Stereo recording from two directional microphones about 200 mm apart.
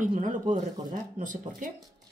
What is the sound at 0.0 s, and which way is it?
A woman's voice, 40° right (ahead or behind).